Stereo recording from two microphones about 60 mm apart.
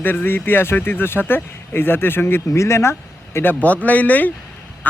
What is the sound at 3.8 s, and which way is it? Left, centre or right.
Speech, left.